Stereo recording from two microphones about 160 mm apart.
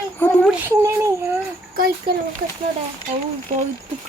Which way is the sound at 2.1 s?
70° right (ahead or behind).